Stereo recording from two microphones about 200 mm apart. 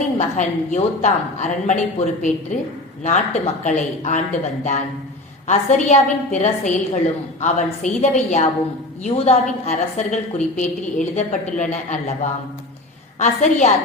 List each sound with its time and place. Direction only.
0.2 s a woman's voice: 40° left (ahead or behind)